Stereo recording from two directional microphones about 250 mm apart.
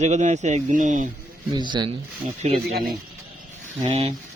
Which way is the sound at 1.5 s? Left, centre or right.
Centre.